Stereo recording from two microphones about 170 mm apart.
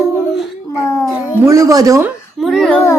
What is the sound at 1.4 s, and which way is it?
Speech, 20° right (ahead or behind).